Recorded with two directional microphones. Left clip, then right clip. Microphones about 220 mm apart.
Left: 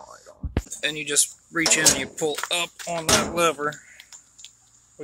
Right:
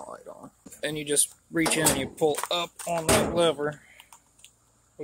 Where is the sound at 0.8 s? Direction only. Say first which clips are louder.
Left 3 dB; 20° right (ahead or behind); by 3.0 s centre (ahead or behind).